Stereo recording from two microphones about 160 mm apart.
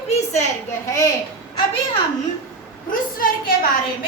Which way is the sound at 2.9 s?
60° left (ahead or behind).